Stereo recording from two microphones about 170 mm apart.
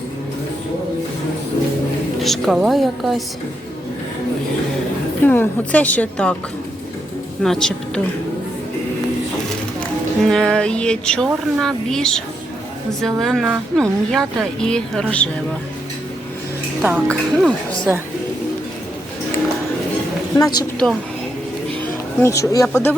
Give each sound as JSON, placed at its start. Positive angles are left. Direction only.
{"t": 2.2, "sound": "speech", "side_deg": 0}
{"t": 5.2, "sound": "a woman's voice", "side_deg": 10}
{"t": 7.4, "sound": "speech", "side_deg": 5}
{"t": 10.2, "sound": "speech", "side_deg": 5}
{"t": 16.8, "sound": "speech", "side_deg": 0}
{"t": 20.3, "sound": "a woman's voice", "side_deg": 20}
{"t": 22.2, "sound": "a woman's voice", "side_deg": 20}